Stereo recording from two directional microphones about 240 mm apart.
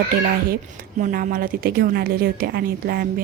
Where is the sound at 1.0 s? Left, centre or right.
Right.